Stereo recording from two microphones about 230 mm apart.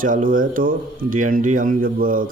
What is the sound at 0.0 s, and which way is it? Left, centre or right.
A man's voice, right.